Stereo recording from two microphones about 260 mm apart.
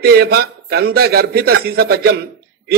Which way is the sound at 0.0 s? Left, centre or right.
Right.